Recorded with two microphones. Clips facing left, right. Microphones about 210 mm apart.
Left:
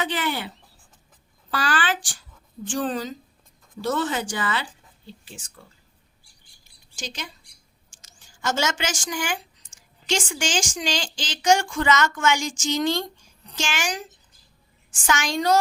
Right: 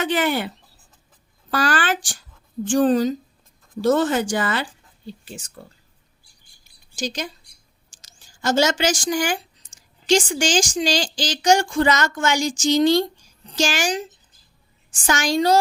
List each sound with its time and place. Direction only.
0.0 s a woman's voice: 50° right (ahead or behind)
6.9 s a woman's voice: 40° right (ahead or behind)
15.0 s a woman's voice: 35° right (ahead or behind)